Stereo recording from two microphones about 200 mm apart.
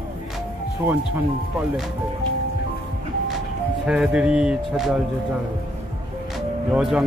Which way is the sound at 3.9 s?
5° right (ahead or behind).